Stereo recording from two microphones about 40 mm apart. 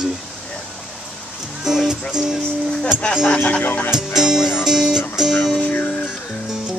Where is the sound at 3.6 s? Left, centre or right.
Left.